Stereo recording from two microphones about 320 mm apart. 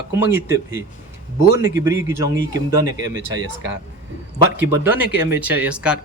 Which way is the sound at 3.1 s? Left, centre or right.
Right.